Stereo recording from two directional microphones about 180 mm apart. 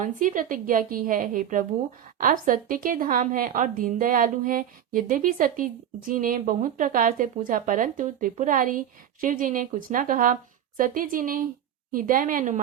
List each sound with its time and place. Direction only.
0.0 s a woman's voice: 45° right (ahead or behind)